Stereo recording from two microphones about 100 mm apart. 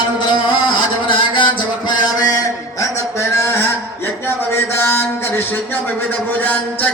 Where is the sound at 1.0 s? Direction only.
55° left (ahead or behind); by 4.3 s 20° left (ahead or behind).